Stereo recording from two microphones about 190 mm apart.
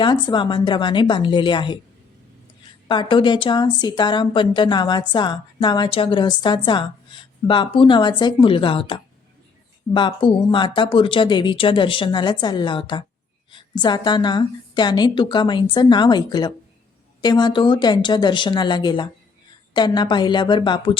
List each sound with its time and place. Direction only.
0.0 s a woman's voice: 25° left (ahead or behind)
2.9 s a woman's voice: 25° left (ahead or behind)